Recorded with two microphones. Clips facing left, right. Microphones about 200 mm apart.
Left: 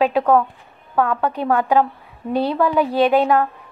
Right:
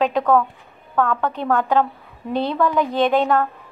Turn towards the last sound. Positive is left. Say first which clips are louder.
# left 2 dB
turn(degrees=15)  # may be behind; listen again after turning